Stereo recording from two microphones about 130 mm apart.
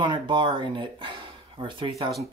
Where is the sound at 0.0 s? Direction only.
35° right (ahead or behind).